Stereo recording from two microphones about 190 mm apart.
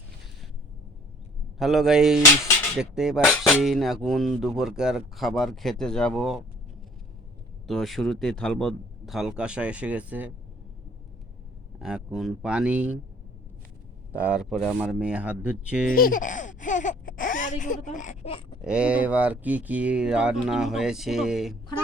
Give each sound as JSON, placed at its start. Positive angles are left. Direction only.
{"t": 1.5, "sound": "speech", "side_deg": 0}
{"t": 7.7, "sound": "speech", "side_deg": 0}
{"t": 11.8, "sound": "speech", "side_deg": 0}
{"t": 14.2, "sound": "speech", "side_deg": -5}
{"t": 15.9, "sound": "speech", "side_deg": 50}
{"t": 18.6, "sound": "speech", "side_deg": -5}